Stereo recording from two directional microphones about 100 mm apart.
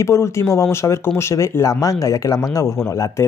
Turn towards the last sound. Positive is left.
turn(degrees=30)  # may be behind; listen again after turning